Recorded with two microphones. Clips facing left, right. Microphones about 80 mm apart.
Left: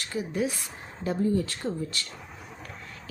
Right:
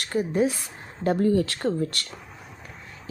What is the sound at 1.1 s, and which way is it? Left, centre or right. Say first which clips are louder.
Speech: right 5 dB; right.